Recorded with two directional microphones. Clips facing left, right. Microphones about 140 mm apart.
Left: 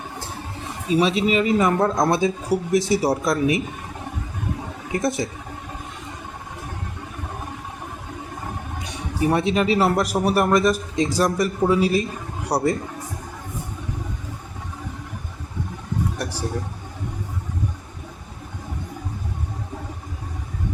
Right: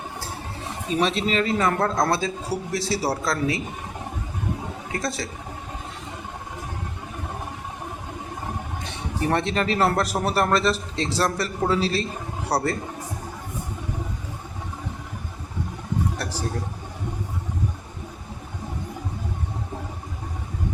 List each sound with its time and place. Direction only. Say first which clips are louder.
0.9 s a man's voice: left 4 dB; 10° left (ahead or behind)
4.9 s a woman's voice: left 6 dB; 20° left (ahead or behind)
8.8 s a man's voice: left 5 dB; 10° left (ahead or behind)
16.1 s a sound: left 2 dB; 10° left (ahead or behind)